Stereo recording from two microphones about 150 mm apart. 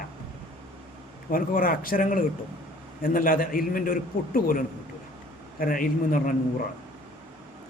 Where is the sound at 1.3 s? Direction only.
70° left (ahead or behind).